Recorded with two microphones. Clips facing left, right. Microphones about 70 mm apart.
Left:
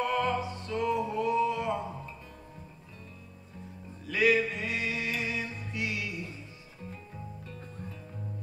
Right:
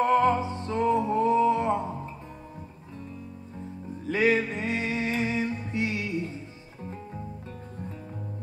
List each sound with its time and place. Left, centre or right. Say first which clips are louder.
0.0 s music: right 7 dB; right
4.0 s music: right 2 dB; right